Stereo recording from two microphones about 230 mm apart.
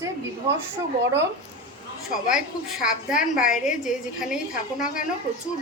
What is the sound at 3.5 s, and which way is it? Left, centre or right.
Speech, centre.